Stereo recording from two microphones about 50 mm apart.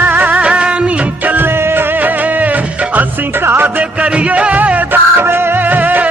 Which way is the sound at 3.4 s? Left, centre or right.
Right.